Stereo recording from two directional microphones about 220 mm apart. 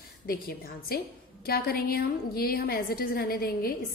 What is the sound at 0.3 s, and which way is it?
A woman's voice, 45° left (ahead or behind).